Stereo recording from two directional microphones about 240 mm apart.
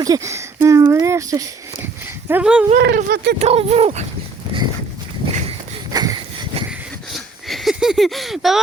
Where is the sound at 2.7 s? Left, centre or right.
Right.